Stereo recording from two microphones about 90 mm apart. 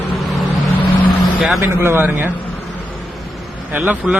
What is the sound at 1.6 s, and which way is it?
Speech, 25° right (ahead or behind).